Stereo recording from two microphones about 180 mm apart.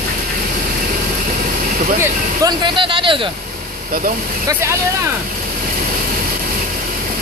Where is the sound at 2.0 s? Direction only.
20° right (ahead or behind).